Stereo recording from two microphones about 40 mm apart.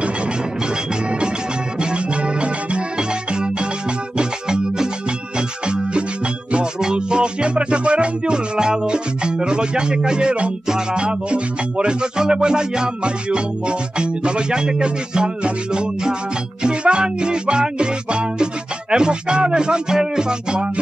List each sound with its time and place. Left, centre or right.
1.8 s music: right